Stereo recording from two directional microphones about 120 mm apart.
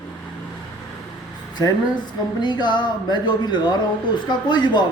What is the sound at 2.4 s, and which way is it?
A man's voice, 40° left (ahead or behind).